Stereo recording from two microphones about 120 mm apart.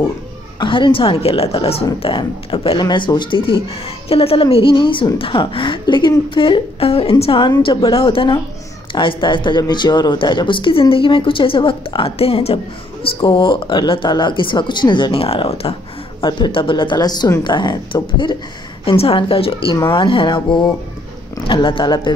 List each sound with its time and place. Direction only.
0.6 s speech: 40° left (ahead or behind)
16.2 s speech: 40° left (ahead or behind)
18.9 s speech: 50° left (ahead or behind)